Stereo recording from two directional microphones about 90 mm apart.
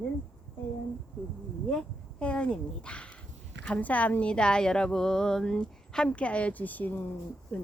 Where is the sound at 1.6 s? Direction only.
10° left (ahead or behind).